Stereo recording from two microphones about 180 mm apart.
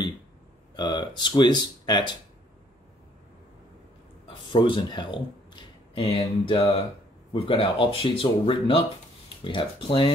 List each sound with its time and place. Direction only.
0.7 s speech: 25° left (ahead or behind)
4.5 s speech: 30° left (ahead or behind)